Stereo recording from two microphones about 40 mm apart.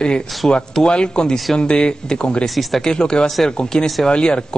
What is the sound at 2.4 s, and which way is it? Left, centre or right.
Speech, centre.